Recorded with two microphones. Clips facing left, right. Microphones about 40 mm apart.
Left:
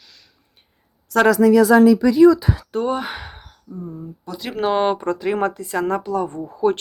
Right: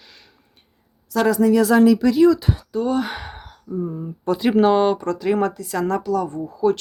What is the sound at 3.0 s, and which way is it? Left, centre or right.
Speech, centre.